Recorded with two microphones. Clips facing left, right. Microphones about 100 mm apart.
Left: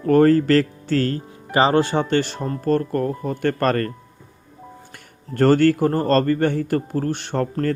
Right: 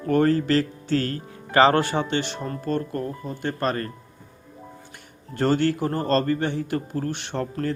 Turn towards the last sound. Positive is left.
turn(degrees=45)  # may be behind; listen again after turning